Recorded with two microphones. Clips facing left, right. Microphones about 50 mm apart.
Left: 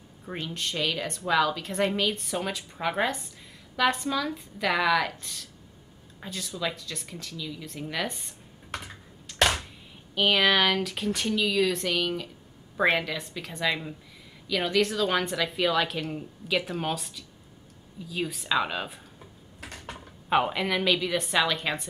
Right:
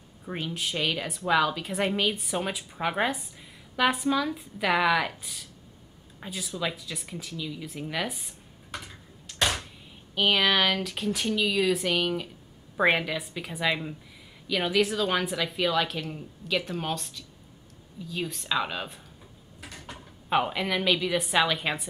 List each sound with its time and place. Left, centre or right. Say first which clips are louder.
0.2 s a woman's voice: right 1 dB; centre
8.7 s computer keyboard: left 2 dB; left
9.3 s a sound: left 4 dB; centre
10.1 s a woman's voice: left 1 dB; centre
19.6 s mechanisms: left 2 dB; left
20.2 s a woman's voice: left 1 dB; centre